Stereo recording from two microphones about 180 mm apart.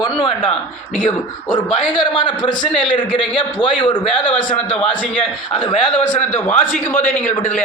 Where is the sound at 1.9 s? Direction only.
25° left (ahead or behind).